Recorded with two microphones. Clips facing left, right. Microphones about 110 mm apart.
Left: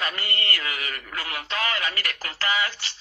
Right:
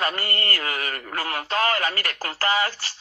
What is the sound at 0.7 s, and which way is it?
Speech, 55° right (ahead or behind).